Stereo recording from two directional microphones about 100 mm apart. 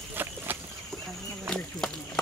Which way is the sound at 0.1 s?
20° right (ahead or behind).